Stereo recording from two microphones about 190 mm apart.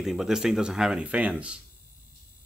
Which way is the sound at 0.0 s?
Centre (ahead or behind).